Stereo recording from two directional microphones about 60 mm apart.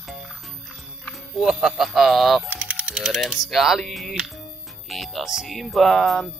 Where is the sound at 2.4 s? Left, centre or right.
Right.